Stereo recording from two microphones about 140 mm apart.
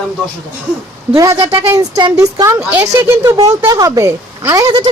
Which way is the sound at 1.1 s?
25° right (ahead or behind).